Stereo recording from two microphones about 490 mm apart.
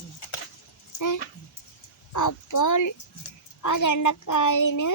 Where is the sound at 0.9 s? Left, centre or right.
Left.